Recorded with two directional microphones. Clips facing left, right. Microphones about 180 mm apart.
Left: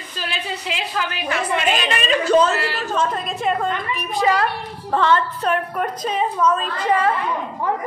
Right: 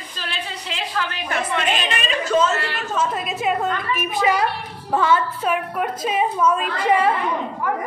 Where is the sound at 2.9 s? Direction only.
5° right (ahead or behind).